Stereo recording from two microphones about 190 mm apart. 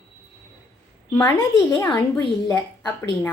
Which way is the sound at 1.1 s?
15° left (ahead or behind).